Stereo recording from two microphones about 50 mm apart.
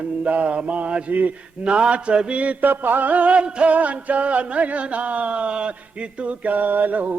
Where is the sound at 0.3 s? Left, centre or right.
Right.